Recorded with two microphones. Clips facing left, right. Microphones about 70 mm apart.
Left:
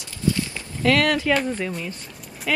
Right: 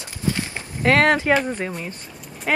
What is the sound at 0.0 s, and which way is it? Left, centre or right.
Clip-clop, right.